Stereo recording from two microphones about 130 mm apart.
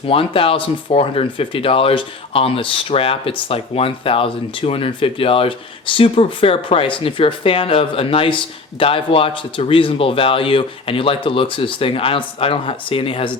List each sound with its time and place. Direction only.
0.0 s speech: 45° left (ahead or behind)